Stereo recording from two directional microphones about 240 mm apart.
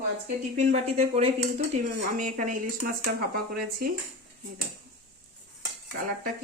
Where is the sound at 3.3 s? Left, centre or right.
Right.